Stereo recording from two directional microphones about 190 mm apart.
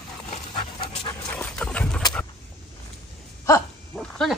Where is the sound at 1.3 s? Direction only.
5° left (ahead or behind).